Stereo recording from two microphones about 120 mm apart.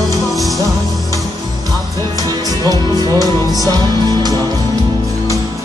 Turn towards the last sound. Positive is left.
turn(degrees=-30)  # may be behind; listen again after turning